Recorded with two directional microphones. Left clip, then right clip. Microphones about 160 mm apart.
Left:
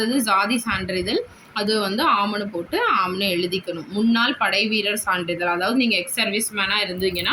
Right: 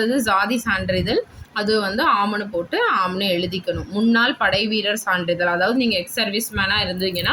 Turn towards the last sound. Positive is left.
turn(degrees=-55)  # may be behind; listen again after turning